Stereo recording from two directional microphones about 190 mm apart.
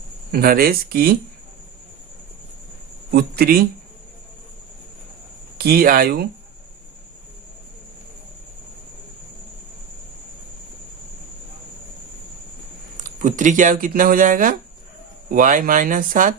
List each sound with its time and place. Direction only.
0.3 s speech: 50° right (ahead or behind)
3.1 s speech: 55° right (ahead or behind)
5.5 s speech: 50° right (ahead or behind)
13.0 s speech: 45° right (ahead or behind)